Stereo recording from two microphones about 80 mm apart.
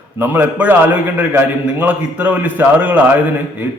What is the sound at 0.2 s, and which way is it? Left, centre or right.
A man's voice, right.